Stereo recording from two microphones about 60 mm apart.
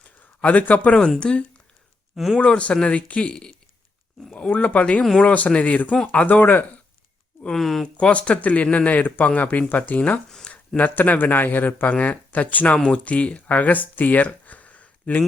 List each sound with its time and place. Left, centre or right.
0.4 s speech: left
7.5 s speech: centre
7.9 s speech: centre
10.2 s a sound: centre
10.8 s speech: left